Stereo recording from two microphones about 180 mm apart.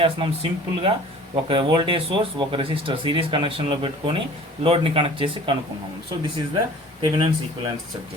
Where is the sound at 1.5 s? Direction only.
30° right (ahead or behind).